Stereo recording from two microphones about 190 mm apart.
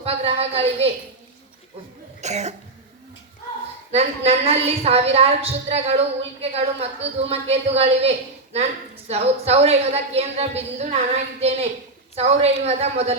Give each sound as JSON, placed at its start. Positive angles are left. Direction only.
{"t": 0.0, "sound": "a sound", "side_deg": -30}
{"t": 2.2, "sound": "a woman's voice", "side_deg": -35}
{"t": 3.9, "sound": "a woman's voice", "side_deg": -30}